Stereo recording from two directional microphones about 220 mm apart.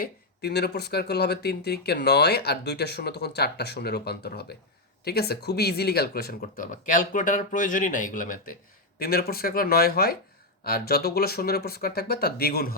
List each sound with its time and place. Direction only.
0.0 s speech: 45° left (ahead or behind)